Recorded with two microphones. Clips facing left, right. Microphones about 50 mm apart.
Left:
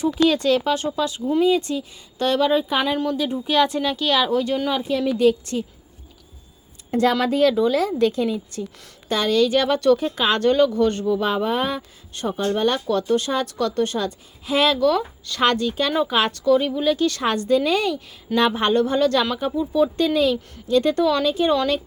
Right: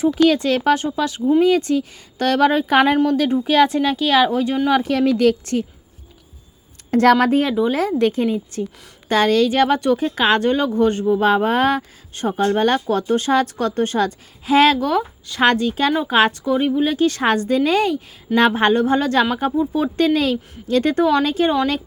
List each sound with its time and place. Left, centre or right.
0.0 s a woman's voice: right
4.7 s a woman's voice: right
6.9 s a woman's voice: right
7.4 s speech: centre
7.7 s a woman's voice: right
9.5 s speech: right
10.4 s speech: right
11.3 s a woman's voice: right
12.1 s speech: right
14.8 s speech: right
15.4 s speech: right
16.5 s speech: right
21.2 s speech: right